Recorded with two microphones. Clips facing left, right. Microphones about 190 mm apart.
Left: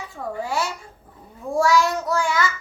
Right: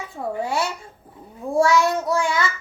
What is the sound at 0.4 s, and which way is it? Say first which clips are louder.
Babbling: right 1 dB; 25° right (ahead or behind).